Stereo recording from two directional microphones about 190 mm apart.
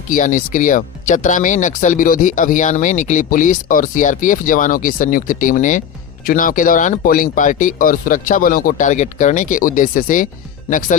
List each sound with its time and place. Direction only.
0.1 s speech: 45° left (ahead or behind)